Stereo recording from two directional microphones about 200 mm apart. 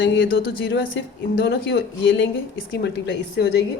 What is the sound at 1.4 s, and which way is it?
Speech, 55° left (ahead or behind).